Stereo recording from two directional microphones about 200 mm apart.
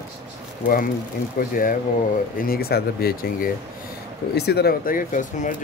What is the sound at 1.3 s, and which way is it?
Speech, 45° left (ahead or behind).